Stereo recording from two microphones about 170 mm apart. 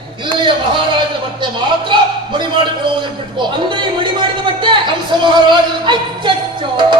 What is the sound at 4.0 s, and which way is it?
Music, 30° right (ahead or behind).